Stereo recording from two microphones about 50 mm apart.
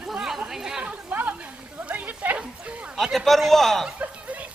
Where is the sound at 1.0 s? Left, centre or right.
Right.